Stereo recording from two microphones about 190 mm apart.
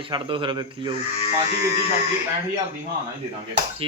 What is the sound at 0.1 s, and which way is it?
Speech, 25° right (ahead or behind).